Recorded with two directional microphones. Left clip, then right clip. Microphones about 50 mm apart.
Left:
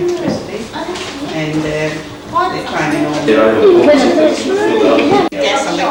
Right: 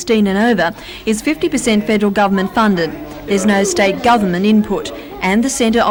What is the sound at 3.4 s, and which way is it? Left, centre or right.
Speech, left.